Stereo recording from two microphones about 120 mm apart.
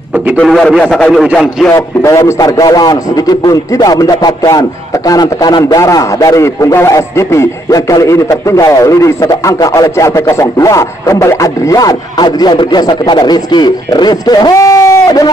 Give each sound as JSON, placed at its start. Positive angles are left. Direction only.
{"t": 0.4, "sound": "a man's voice", "side_deg": 5}
{"t": 1.7, "sound": "a man's voice", "side_deg": 25}